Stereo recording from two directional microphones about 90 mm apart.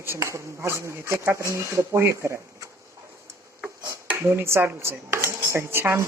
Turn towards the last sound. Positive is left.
turn(degrees=-25)  # may be behind; listen again after turning